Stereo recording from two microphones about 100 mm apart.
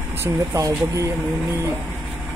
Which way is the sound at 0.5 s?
35° right (ahead or behind).